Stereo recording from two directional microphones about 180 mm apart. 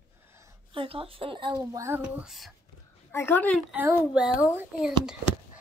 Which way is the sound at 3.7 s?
10° right (ahead or behind).